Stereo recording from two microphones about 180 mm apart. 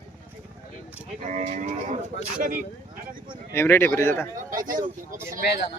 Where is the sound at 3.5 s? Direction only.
15° left (ahead or behind).